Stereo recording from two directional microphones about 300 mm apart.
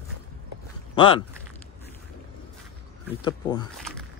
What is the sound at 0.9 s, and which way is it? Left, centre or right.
Speech, centre.